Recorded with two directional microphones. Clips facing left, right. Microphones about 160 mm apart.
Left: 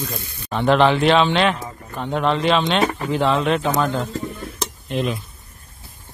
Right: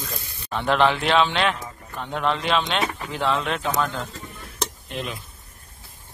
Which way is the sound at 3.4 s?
5° left (ahead or behind).